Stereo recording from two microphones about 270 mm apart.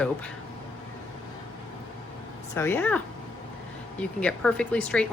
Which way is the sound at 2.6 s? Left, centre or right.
Centre.